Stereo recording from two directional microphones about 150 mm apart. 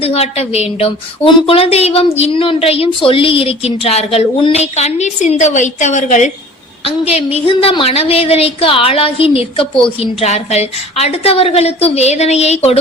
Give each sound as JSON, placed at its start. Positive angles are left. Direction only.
{"t": 0.0, "sound": "speech", "side_deg": 40}
{"t": 6.8, "sound": "speech", "side_deg": 40}